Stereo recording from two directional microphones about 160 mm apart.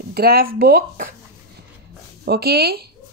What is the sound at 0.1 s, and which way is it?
Speech, 70° right (ahead or behind).